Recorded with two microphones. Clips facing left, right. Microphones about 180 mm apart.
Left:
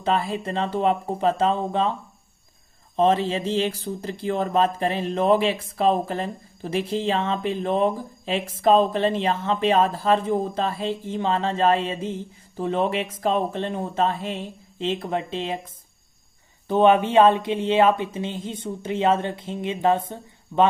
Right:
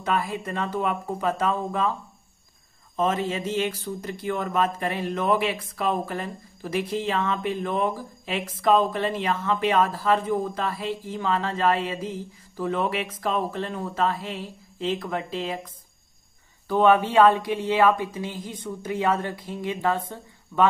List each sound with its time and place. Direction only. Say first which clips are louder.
0.0 s speech: left 3 dB; 30° left (ahead or behind)
3.0 s speech: left 5 dB; 30° left (ahead or behind)